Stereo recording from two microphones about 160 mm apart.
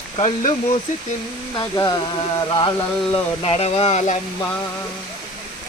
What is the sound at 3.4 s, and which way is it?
Speech, 40° left (ahead or behind).